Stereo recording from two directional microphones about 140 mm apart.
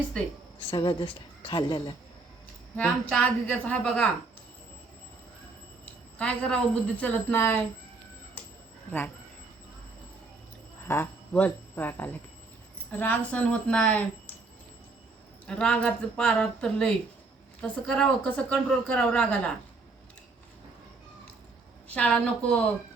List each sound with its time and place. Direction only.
0.7 s a woman's voice: 35° left (ahead or behind)
2.7 s a woman's voice: 5° left (ahead or behind)
5.8 s a woman's voice: 10° left (ahead or behind)
10.8 s a woman's voice: 15° left (ahead or behind)
15.4 s a woman's voice: 5° left (ahead or behind)
21.8 s a woman's voice: 10° left (ahead or behind)